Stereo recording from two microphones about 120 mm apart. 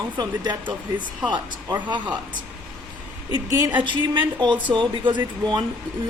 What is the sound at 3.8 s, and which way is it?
Speech, 40° right (ahead or behind).